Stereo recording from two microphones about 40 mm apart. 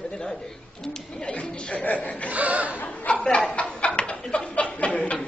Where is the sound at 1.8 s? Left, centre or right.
Left.